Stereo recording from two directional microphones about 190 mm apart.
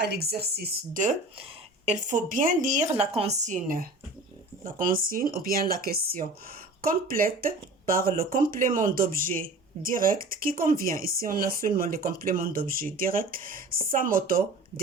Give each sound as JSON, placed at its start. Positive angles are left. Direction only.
{"t": 0.0, "sound": "speech", "side_deg": -60}
{"t": 1.4, "sound": "a woman's voice", "side_deg": -35}